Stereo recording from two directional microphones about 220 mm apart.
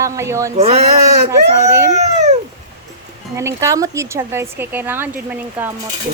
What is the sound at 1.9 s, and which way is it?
Cat, 30° right (ahead or behind).